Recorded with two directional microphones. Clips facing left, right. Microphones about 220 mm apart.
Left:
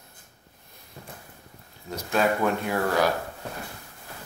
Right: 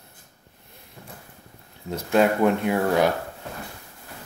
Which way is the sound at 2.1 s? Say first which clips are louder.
Right 5 dB; 20° right (ahead or behind).